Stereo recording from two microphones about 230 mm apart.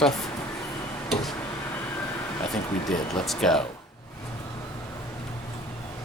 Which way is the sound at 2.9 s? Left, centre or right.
Centre.